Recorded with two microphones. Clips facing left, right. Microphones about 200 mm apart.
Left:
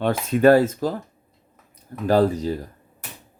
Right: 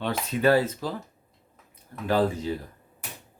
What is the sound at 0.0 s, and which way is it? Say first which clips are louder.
Speech: left 7 dB; 50° left (ahead or behind).